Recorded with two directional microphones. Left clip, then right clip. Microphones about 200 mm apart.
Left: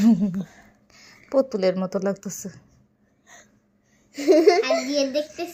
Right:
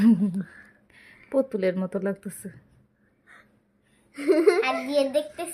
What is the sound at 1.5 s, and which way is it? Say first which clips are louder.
A woman's voice: left 4 dB; 5° right (ahead or behind).